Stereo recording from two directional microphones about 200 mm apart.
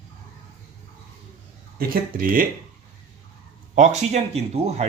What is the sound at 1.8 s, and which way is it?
Speech, 45° right (ahead or behind).